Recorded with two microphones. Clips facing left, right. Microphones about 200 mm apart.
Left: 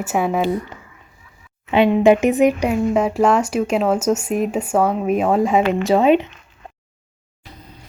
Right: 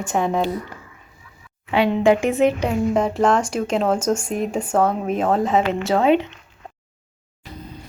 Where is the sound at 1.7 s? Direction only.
20° left (ahead or behind).